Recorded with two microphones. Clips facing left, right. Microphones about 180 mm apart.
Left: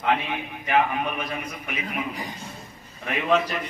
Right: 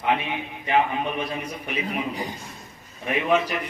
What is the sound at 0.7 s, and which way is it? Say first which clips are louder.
A man's voice: even; 30° right (ahead or behind).